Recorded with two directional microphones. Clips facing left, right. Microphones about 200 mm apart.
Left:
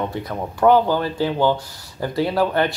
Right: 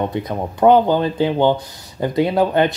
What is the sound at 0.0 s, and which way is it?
Speech, 20° right (ahead or behind).